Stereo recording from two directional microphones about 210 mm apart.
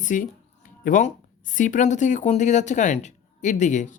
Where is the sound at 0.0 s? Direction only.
40° left (ahead or behind).